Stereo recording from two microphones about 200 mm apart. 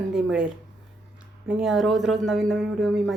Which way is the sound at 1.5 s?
Centre (ahead or behind).